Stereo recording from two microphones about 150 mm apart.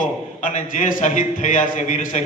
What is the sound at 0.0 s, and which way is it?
A man's voice, 55° left (ahead or behind).